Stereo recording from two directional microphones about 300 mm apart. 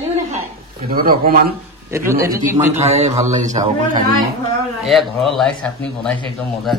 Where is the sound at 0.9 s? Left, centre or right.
Right.